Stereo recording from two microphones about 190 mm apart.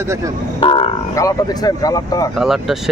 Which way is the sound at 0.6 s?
30° left (ahead or behind).